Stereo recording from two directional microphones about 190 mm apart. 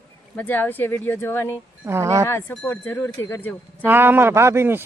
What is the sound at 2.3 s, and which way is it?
A woman's voice, 10° left (ahead or behind).